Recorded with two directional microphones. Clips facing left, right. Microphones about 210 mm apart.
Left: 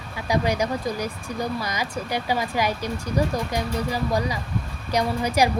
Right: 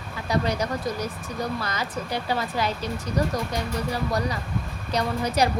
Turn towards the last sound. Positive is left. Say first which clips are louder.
# left 2 dB
turn(degrees=10)  # may be behind; listen again after turning